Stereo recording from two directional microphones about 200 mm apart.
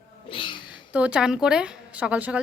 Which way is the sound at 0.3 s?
25° left (ahead or behind).